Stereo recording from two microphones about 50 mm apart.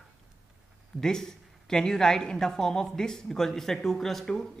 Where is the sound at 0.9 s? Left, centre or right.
Centre.